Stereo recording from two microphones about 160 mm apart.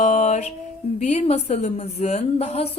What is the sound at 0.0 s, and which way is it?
Mantra, 45° left (ahead or behind).